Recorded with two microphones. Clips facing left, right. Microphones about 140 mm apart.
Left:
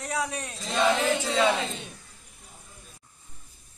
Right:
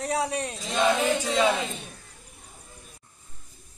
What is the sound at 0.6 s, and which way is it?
Speech, centre (ahead or behind).